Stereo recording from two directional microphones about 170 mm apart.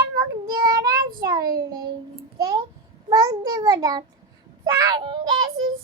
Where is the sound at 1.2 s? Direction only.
25° right (ahead or behind).